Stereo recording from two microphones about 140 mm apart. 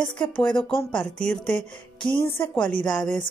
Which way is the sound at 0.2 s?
5° left (ahead or behind).